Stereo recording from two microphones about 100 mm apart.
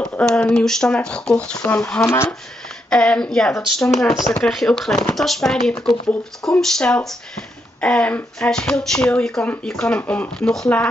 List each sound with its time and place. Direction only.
0.2 s speech: 5° left (ahead or behind)
10.3 s speech: 5° left (ahead or behind)